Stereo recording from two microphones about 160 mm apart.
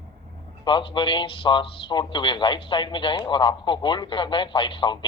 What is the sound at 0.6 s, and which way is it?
A man's voice, 30° left (ahead or behind).